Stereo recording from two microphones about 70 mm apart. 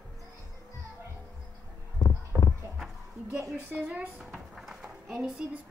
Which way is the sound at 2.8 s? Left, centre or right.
Centre.